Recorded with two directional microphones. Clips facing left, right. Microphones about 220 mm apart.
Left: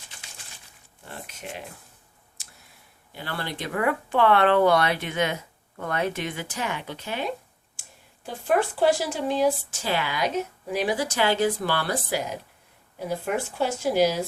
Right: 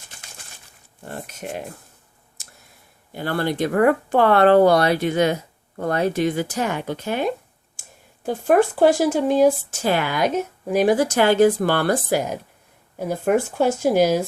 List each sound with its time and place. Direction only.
0.2 s a sound: 45° right (ahead or behind)
1.0 s speech: 45° right (ahead or behind)
2.4 s clicking: 45° right (ahead or behind)
3.1 s speech: 45° right (ahead or behind)